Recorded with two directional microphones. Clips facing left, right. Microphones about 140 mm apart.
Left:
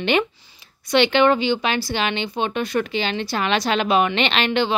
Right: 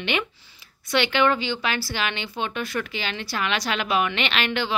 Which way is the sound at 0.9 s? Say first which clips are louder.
Left 5 dB; 25° left (ahead or behind).